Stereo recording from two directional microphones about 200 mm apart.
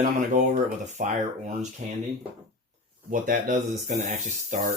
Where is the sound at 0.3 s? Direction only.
40° right (ahead or behind).